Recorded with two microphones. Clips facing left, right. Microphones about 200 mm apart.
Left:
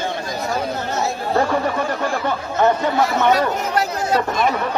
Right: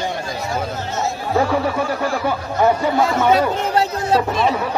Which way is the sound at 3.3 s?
30° right (ahead or behind).